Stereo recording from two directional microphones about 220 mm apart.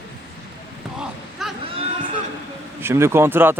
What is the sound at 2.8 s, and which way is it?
Speech, 10° right (ahead or behind).